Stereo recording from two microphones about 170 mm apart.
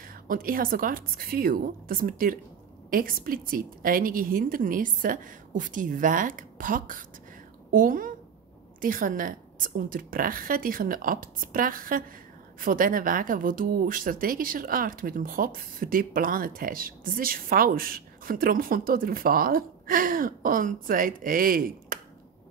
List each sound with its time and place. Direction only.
0.0 s a woman's voice: 55° right (ahead or behind)